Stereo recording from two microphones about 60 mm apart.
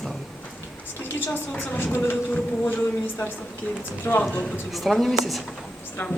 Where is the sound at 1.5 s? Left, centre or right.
Left.